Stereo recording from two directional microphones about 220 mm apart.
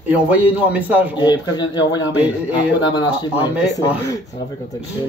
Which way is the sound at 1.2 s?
20° left (ahead or behind).